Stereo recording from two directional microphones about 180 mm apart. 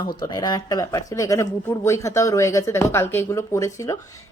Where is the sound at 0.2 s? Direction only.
25° left (ahead or behind).